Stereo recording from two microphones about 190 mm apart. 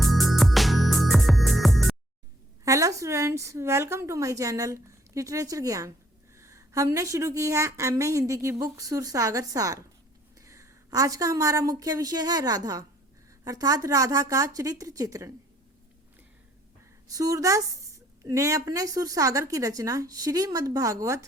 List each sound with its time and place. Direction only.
0.0 s music: centre (ahead or behind)
2.6 s a woman's voice: 15° right (ahead or behind)
17.1 s a woman's voice: 20° right (ahead or behind)